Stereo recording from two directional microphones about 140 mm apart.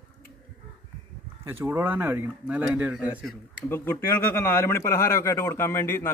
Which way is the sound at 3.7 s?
15° left (ahead or behind).